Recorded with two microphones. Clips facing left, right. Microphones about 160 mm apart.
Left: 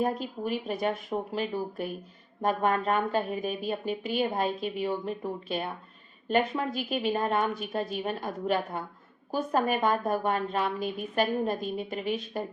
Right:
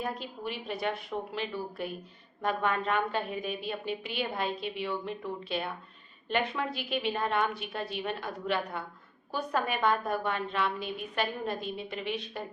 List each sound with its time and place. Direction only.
0.0 s a woman's voice: 45° left (ahead or behind)